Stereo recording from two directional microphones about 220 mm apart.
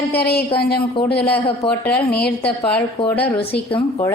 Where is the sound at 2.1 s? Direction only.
45° left (ahead or behind).